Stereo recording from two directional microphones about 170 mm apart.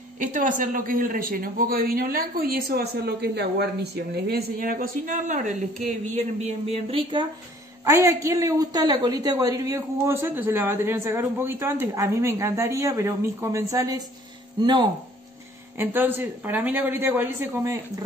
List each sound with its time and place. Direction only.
0.2 s a man's voice: 50° right (ahead or behind); by 7.2 s 30° right (ahead or behind)
7.8 s a woman's voice: 20° right (ahead or behind)
15.8 s a woman's voice: 10° right (ahead or behind)